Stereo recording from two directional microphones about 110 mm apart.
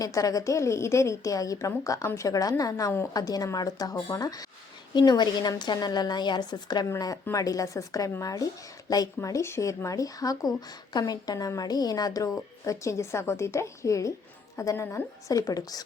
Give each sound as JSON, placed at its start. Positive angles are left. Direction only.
{"t": 0.0, "sound": "a woman's voice", "side_deg": 30}